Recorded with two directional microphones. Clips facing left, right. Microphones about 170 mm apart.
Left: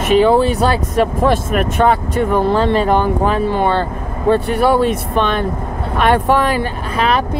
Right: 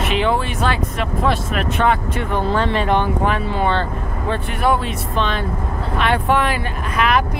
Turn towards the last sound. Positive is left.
turn(degrees=30)  # may be behind; listen again after turning